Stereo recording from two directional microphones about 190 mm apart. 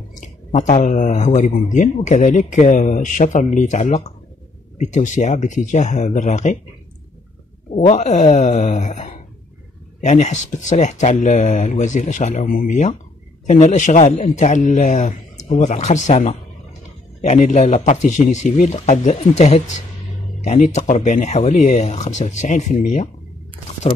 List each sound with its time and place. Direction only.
0.1 s a man's voice: 40° left (ahead or behind)
7.7 s a man's voice: 35° left (ahead or behind)